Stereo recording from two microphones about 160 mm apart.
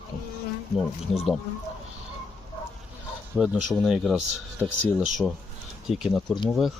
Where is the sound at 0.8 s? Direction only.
Centre (ahead or behind).